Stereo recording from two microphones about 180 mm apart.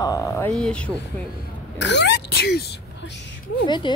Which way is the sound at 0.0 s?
20° left (ahead or behind).